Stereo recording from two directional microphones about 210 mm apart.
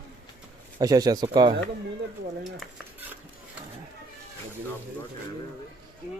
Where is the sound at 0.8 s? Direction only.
15° right (ahead or behind).